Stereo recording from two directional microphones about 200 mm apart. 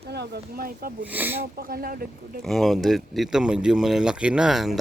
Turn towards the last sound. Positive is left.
turn(degrees=0)  # may be behind; listen again after turning